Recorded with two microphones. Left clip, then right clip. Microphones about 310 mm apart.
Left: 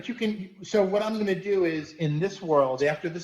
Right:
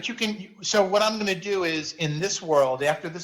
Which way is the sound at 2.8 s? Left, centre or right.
Centre.